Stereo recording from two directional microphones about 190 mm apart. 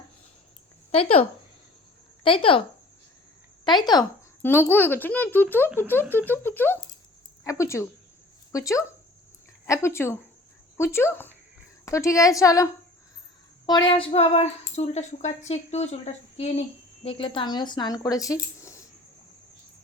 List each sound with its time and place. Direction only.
0.9 s speech: 30° left (ahead or behind)
2.2 s a woman's voice: 30° left (ahead or behind)
3.6 s speech: 25° left (ahead or behind)
4.4 s speech: 10° left (ahead or behind)
13.7 s a woman's voice: 25° left (ahead or behind)
18.6 s a sound: 15° left (ahead or behind)